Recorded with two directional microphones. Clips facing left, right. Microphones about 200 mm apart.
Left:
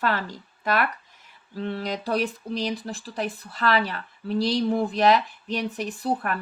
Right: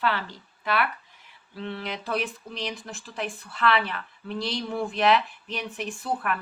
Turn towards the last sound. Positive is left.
turn(degrees=35)  # may be behind; listen again after turning